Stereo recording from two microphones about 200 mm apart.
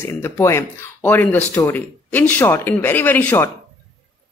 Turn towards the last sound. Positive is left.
turn(degrees=10)  # may be behind; listen again after turning